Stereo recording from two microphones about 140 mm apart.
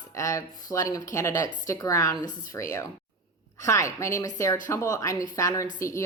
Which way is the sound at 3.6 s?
20° left (ahead or behind).